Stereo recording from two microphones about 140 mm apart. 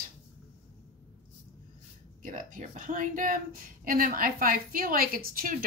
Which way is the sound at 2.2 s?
65° right (ahead or behind).